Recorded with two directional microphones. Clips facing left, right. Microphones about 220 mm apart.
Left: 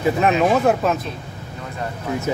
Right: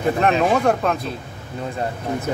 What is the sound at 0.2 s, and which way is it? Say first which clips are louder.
Speech: left 1 dB; 5° left (ahead or behind).